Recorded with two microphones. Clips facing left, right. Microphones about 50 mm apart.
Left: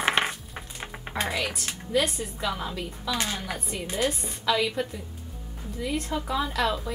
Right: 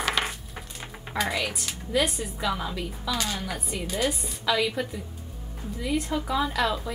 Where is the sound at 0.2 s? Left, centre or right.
Centre.